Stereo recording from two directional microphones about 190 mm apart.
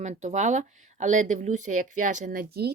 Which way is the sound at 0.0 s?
40° right (ahead or behind).